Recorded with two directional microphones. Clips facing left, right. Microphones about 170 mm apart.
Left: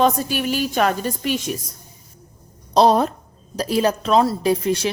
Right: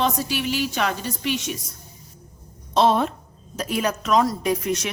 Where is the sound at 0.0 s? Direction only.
45° left (ahead or behind).